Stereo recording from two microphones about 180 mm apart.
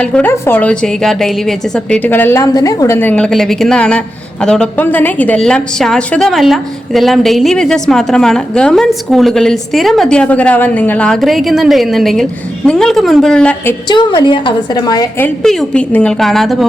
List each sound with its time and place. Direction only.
0.0 s a woman's voice: 5° left (ahead or behind)
13.8 s a woman's voice: 25° left (ahead or behind)
15.2 s a woman's voice: 5° left (ahead or behind)